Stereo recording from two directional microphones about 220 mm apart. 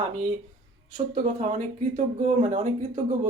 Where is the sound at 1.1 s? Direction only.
35° right (ahead or behind).